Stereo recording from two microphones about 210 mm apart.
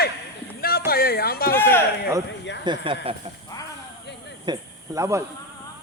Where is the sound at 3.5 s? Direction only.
20° left (ahead or behind).